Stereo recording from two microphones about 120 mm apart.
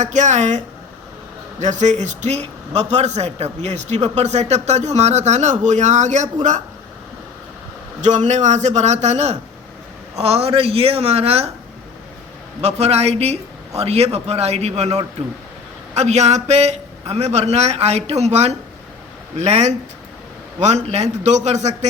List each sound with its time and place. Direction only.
0.0 s a man's voice: 85° right
8.0 s a man's voice: 80° right
10.2 s a man's voice: 60° right (ahead or behind)
12.6 s a man's voice: 60° right (ahead or behind)
16.0 s a man's voice: 70° right (ahead or behind)